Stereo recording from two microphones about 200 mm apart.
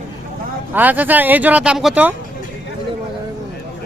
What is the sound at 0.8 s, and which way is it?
Speech, 10° right (ahead or behind).